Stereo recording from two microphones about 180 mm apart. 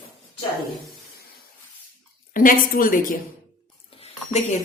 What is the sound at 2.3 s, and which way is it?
Speech, 50° left (ahead or behind).